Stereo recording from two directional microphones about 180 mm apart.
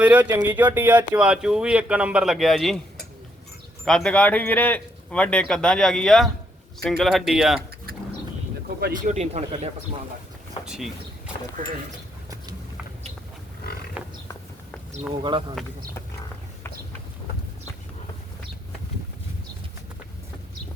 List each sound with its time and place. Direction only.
0.0 s speech: 10° right (ahead or behind)
3.8 s speech: 5° left (ahead or behind)
9.0 s speech: 35° right (ahead or behind)
15.2 s speech: 25° right (ahead or behind)